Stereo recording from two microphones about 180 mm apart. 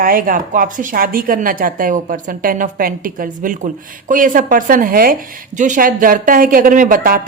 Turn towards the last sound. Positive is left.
turn(degrees=-50)  # may be behind; listen again after turning